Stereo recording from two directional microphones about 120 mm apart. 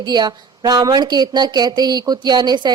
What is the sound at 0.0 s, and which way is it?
Speech, 35° right (ahead or behind).